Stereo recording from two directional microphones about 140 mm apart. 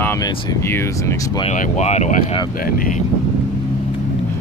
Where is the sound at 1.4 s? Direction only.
50° left (ahead or behind).